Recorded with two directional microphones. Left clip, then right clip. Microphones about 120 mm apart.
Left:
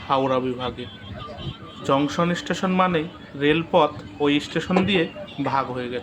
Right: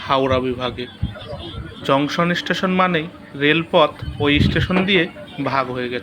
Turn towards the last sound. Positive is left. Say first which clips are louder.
# right 3 dB
turn(degrees=0)  # may be behind; listen again after turning